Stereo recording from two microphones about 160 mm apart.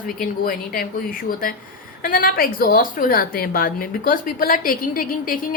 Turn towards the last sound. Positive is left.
turn(degrees=60)  # may be behind; listen again after turning